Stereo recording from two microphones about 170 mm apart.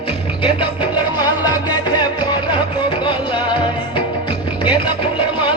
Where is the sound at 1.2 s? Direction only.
25° left (ahead or behind).